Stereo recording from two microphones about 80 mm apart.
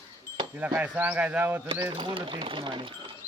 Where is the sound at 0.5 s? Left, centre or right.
Right.